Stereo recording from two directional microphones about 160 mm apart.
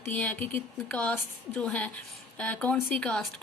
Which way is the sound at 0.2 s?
10° left (ahead or behind).